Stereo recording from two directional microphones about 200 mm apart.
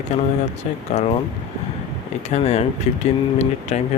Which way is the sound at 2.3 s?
35° left (ahead or behind).